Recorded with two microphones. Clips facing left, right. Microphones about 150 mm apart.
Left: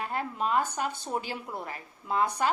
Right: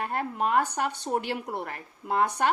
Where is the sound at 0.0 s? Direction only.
55° right (ahead or behind).